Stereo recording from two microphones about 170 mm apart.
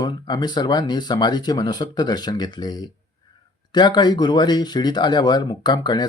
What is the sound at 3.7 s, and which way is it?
Speech, 25° left (ahead or behind).